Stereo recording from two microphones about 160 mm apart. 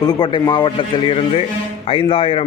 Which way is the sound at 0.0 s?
25° left (ahead or behind).